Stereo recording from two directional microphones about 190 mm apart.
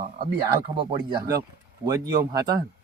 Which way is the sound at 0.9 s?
25° right (ahead or behind).